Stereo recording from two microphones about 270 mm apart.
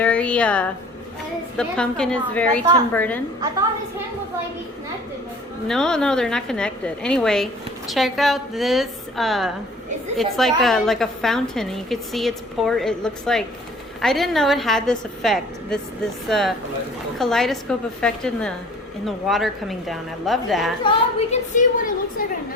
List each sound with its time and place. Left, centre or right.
0.0 s a woman's voice: centre
5.6 s a woman's voice: centre
20.8 s a woman's voice: left